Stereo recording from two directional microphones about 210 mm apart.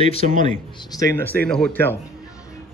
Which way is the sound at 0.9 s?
15° left (ahead or behind).